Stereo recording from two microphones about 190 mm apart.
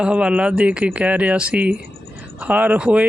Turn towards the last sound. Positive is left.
turn(degrees=-5)  # may be behind; listen again after turning